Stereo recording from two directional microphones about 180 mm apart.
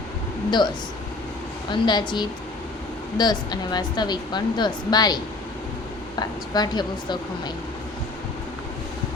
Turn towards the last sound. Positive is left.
turn(degrees=25)  # may be behind; listen again after turning